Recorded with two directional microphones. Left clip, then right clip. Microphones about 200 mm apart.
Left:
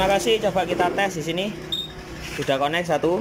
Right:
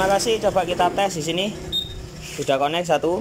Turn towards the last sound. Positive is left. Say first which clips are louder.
# right 1 dB
turn(degrees=-5)  # may be behind; listen again after turning